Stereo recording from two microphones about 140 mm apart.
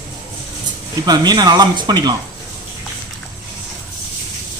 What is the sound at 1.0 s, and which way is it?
Speech, 30° right (ahead or behind).